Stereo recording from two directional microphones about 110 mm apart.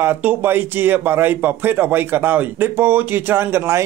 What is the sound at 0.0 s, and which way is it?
A man's voice, 15° right (ahead or behind).